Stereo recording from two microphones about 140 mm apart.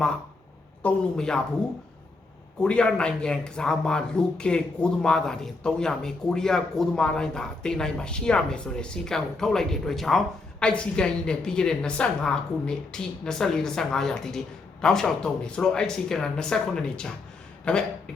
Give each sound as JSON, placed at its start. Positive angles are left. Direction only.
{"t": 0.8, "sound": "speech", "side_deg": 5}
{"t": 2.6, "sound": "speech", "side_deg": 5}